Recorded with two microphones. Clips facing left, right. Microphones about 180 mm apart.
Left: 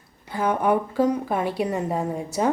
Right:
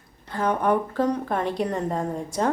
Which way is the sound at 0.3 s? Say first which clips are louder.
Left 1 dB; 10° left (ahead or behind).